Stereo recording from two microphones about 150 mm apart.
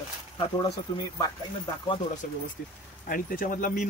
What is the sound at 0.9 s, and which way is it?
Speech, 25° left (ahead or behind).